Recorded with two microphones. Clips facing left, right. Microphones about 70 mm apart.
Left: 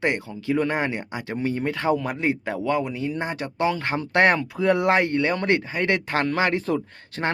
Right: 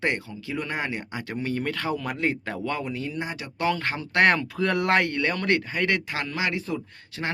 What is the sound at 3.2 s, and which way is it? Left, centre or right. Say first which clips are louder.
Speech: left 5 dB; left.